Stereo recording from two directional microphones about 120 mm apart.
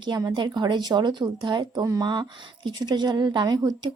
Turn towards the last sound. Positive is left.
turn(degrees=-35)  # may be behind; listen again after turning